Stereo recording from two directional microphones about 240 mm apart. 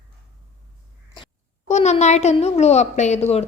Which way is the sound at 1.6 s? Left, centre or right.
Left.